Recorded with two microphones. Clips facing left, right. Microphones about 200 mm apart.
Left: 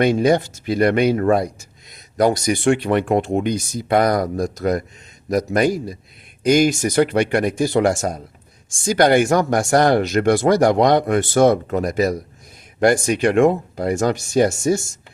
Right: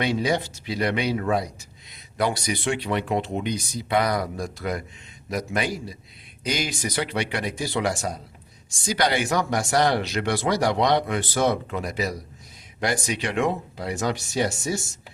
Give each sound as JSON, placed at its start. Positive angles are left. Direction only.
{"t": 0.0, "sound": "speech", "side_deg": 50}